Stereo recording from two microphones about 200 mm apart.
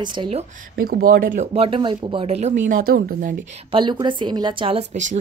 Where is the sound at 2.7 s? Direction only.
45° right (ahead or behind).